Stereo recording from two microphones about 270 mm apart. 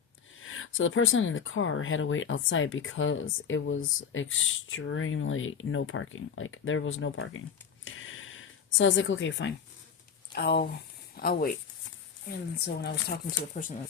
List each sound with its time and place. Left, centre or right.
0.3 s speech: left
7.9 s a sound: left
10.3 s speech: left